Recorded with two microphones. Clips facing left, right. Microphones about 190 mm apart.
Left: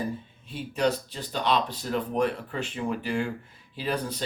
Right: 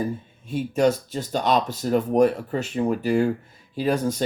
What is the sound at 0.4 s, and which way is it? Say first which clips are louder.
Speech: right 6 dB; 45° right (ahead or behind).